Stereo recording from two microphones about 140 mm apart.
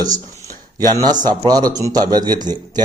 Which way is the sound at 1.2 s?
30° right (ahead or behind).